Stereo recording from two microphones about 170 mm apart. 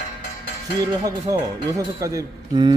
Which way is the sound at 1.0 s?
20° right (ahead or behind).